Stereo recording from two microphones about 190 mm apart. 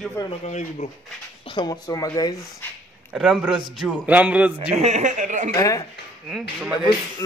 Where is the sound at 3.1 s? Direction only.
5° right (ahead or behind).